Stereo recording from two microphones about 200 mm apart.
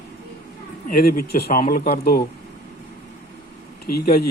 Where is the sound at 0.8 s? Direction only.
45° left (ahead or behind).